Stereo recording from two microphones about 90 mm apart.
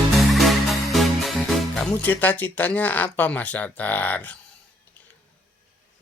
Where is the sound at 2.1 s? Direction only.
20° left (ahead or behind).